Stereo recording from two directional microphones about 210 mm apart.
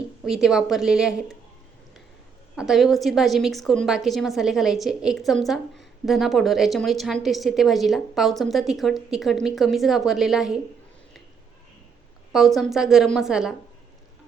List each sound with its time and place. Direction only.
0.3 s a woman's voice: centre (ahead or behind)
2.6 s a woman's voice: centre (ahead or behind)
12.3 s a woman's voice: centre (ahead or behind)